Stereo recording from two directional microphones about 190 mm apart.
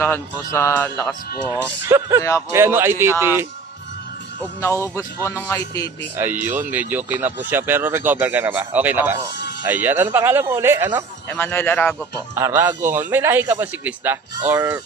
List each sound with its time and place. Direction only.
0.0 s speech: 10° left (ahead or behind)
1.5 s speech: 15° right (ahead or behind)
4.6 s speech: 15° left (ahead or behind)
6.1 s speech: 10° right (ahead or behind)
11.3 s speech: 10° left (ahead or behind)
12.4 s speech: 15° right (ahead or behind)